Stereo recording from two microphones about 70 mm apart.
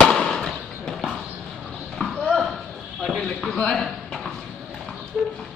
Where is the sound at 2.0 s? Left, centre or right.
Left.